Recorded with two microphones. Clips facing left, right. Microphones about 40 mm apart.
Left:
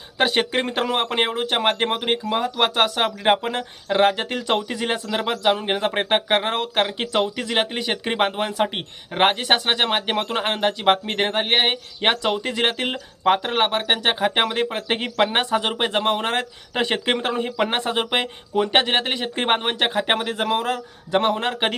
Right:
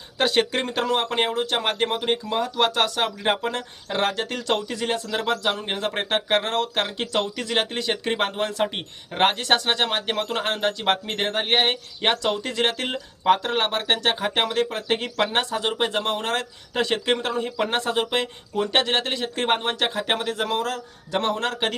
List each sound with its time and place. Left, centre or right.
0.2 s speech: centre